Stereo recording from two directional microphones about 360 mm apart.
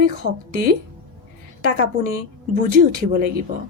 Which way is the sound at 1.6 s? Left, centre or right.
Right.